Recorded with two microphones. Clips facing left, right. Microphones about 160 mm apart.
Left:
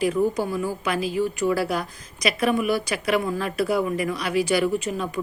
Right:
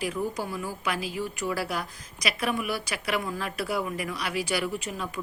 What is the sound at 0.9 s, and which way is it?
A woman's voice, 10° right (ahead or behind).